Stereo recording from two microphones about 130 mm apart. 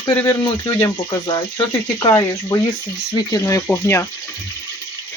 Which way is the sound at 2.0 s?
25° left (ahead or behind).